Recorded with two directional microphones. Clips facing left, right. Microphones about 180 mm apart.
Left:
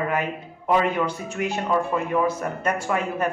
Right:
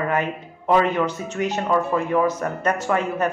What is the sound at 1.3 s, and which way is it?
Speech, 40° right (ahead or behind).